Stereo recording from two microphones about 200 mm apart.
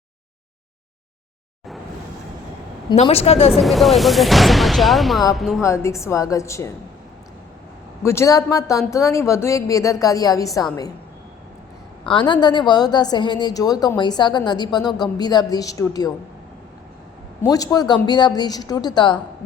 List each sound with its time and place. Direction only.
2.9 s a woman's voice: 30° left (ahead or behind)
3.5 s speech: centre (ahead or behind)
5.6 s a woman's voice: 15° left (ahead or behind)
8.0 s a woman's voice: 15° left (ahead or behind)
12.0 s a woman's voice: 25° left (ahead or behind)
17.4 s a woman's voice: 20° left (ahead or behind)